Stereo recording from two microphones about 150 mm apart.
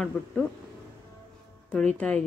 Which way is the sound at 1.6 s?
10° left (ahead or behind).